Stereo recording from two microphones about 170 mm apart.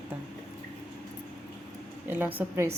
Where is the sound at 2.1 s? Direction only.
10° right (ahead or behind).